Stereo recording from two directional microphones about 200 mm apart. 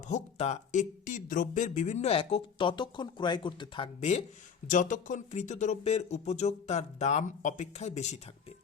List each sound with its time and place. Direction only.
0.1 s speech: 35° left (ahead or behind)